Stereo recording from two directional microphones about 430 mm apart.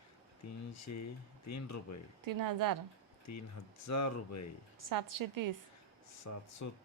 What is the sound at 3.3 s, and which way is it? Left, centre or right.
Speech, left.